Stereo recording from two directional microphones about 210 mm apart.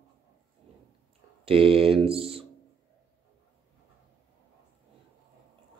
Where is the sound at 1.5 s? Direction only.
25° right (ahead or behind).